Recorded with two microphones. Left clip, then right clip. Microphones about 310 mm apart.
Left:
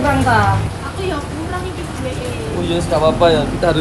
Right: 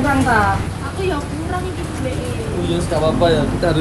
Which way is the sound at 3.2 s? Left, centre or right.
Centre.